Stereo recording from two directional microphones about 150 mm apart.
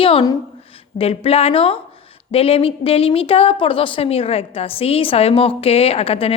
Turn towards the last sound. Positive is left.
turn(degrees=40)  # may be behind; listen again after turning